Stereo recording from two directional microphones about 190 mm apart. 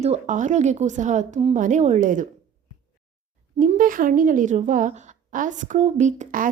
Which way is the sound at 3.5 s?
45° right (ahead or behind).